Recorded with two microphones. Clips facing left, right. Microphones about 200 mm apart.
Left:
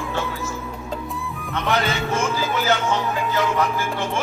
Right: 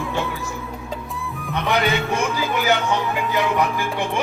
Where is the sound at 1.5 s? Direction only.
15° right (ahead or behind).